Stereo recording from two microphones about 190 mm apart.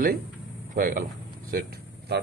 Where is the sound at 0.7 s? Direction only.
45° right (ahead or behind).